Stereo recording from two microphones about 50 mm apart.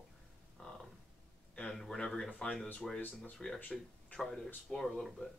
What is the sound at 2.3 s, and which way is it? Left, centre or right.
Speech, left.